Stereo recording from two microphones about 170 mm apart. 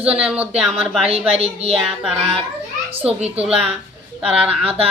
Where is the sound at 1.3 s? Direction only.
35° right (ahead or behind).